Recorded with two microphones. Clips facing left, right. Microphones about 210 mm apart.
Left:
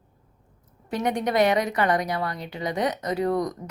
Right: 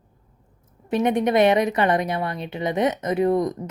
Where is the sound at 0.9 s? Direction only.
25° right (ahead or behind).